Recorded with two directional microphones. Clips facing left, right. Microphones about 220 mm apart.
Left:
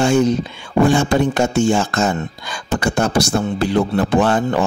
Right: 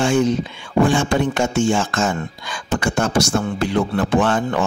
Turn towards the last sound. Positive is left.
turn(degrees=35)  # may be behind; listen again after turning